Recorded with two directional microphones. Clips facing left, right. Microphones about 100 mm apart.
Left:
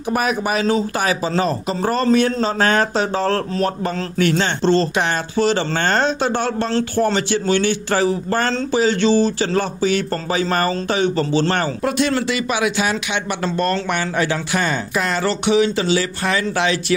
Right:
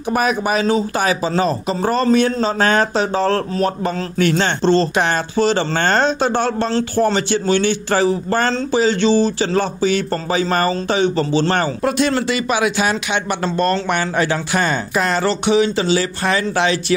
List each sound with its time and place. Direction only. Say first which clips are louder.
0.1 s speech: right 2 dB; 25° right (ahead or behind)
4.2 s speech: right 1 dB; 35° right (ahead or behind)
11.8 s speech: right 1 dB; 40° right (ahead or behind)